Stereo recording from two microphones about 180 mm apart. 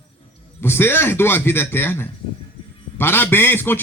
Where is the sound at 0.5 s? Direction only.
15° left (ahead or behind).